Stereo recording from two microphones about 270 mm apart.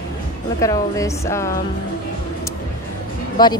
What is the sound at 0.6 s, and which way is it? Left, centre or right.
Speech, centre.